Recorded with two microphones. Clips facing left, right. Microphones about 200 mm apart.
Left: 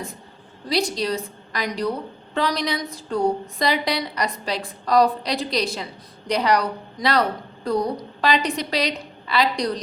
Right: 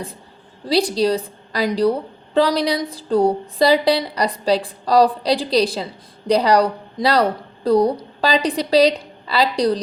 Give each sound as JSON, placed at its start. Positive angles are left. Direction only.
{"t": 0.7, "sound": "a woman's voice", "side_deg": -35}